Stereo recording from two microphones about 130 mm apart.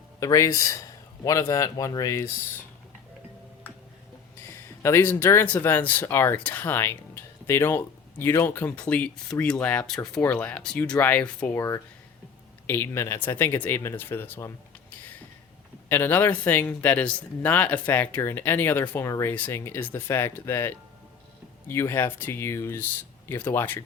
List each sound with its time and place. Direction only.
0.2 s speech: 25° left (ahead or behind)
4.4 s speech: 20° left (ahead or behind)